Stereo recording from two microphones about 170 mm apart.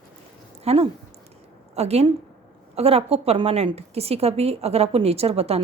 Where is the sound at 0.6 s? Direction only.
35° right (ahead or behind).